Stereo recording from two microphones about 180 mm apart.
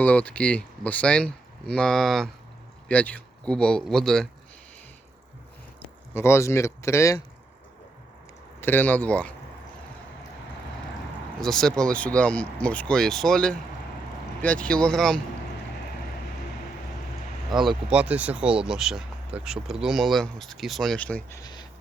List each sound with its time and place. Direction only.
0.0 s speech: 10° left (ahead or behind)
6.1 s speech: 15° left (ahead or behind)
8.6 s speech: 10° left (ahead or behind)
11.3 s speech: 5° left (ahead or behind)
17.5 s speech: centre (ahead or behind); by 21.7 s 20° left (ahead or behind)